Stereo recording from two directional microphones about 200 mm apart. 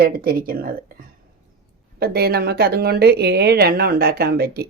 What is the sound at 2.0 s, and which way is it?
Speech, 50° right (ahead or behind).